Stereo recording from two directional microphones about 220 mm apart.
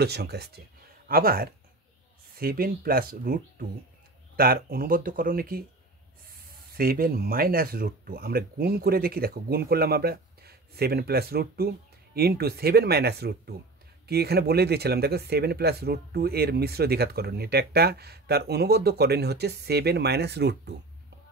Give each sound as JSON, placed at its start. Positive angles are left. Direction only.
{"t": 0.0, "sound": "speech", "side_deg": -45}
{"t": 6.8, "sound": "speech", "side_deg": -40}